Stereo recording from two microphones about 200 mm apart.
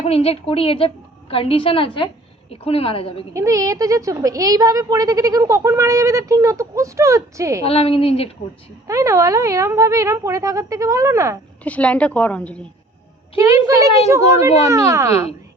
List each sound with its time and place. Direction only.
0.0 s a woman's voice: 30° left (ahead or behind)
3.3 s speech: 15° right (ahead or behind)
7.6 s a woman's voice: 30° left (ahead or behind)
8.9 s speech: 15° right (ahead or behind)
11.6 s a woman's voice: 5° left (ahead or behind)
13.3 s speech: 15° right (ahead or behind)